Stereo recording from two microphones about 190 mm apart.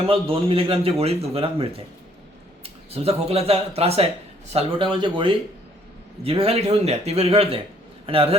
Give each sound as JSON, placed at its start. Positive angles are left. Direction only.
{"t": 0.0, "sound": "a man's voice", "side_deg": -30}